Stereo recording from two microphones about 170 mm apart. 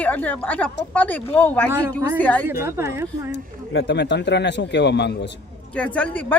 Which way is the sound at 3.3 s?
90° left.